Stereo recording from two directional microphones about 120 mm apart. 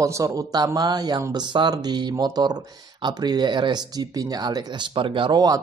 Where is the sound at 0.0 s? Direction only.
25° right (ahead or behind).